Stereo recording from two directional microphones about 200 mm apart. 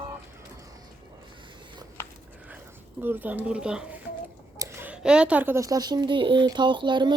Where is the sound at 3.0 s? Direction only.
10° right (ahead or behind).